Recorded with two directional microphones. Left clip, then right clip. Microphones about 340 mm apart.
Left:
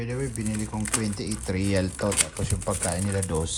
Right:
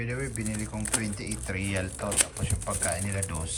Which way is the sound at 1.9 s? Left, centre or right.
Centre.